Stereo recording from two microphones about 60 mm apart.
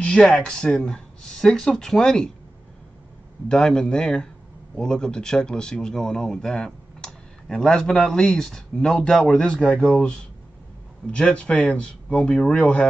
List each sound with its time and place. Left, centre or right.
0.0 s a sound: centre
0.3 s speech: centre
3.4 s speech: centre
11.1 s speech: centre